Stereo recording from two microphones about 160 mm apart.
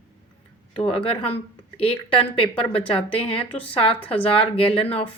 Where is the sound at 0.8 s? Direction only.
35° left (ahead or behind).